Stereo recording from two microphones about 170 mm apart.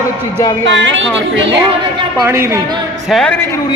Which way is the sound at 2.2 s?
15° right (ahead or behind).